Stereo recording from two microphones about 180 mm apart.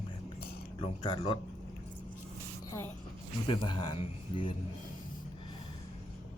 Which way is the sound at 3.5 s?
25° left (ahead or behind).